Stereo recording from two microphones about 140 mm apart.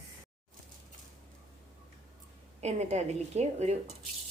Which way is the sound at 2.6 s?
55° right (ahead or behind).